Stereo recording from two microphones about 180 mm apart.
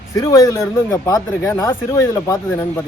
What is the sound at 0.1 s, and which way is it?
Speech, 15° left (ahead or behind).